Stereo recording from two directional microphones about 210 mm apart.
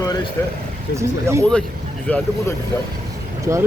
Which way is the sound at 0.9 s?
15° right (ahead or behind).